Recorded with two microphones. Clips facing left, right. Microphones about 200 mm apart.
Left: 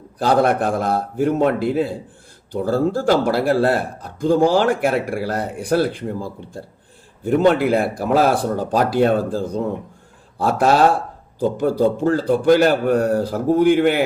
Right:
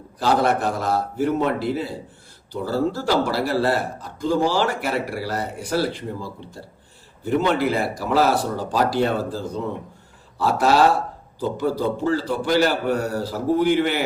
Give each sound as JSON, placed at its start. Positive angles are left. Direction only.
{"t": 0.2, "sound": "a man's voice", "side_deg": 50}
{"t": 7.6, "sound": "a man's voice", "side_deg": 55}